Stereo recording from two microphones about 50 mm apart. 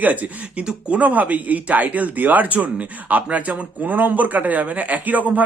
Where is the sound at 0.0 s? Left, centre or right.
Right.